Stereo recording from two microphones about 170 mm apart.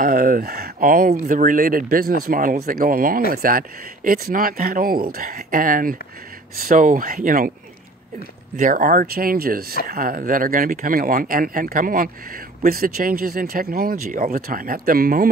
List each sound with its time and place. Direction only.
0.0 s speech: 55° right (ahead or behind)
8.5 s speech: 55° right (ahead or behind)